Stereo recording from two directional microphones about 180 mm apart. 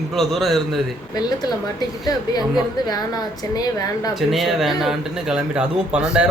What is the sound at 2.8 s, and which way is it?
A woman's voice, 20° left (ahead or behind).